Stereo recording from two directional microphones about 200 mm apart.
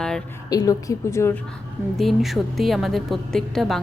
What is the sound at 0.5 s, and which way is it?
Speech, 20° left (ahead or behind).